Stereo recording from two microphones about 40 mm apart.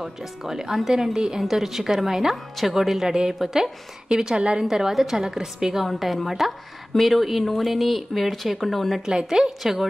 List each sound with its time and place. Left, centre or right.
0.0 s a woman's voice: centre
1.4 s a woman's voice: centre
2.3 s a woman's voice: centre
2.7 s a woman's voice: centre; by 4.6 s right
4.6 s a woman's voice: centre
5.9 s a woman's voice: centre
9.0 s a woman's voice: centre
9.6 s a woman's voice: centre